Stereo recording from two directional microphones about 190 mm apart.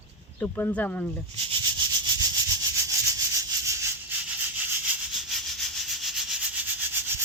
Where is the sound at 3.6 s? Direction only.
15° right (ahead or behind).